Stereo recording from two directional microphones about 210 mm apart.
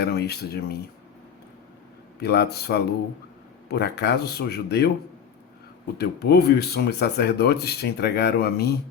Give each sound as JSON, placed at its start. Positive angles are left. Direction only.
{"t": 0.0, "sound": "speech", "side_deg": 50}
{"t": 2.2, "sound": "speech", "side_deg": 50}
{"t": 6.0, "sound": "speech", "side_deg": 50}